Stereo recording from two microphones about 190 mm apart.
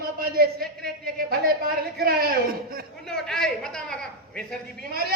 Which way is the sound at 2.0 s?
55° right (ahead or behind).